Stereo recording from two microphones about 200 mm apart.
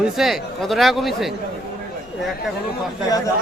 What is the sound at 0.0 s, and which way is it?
A man's voice, centre (ahead or behind).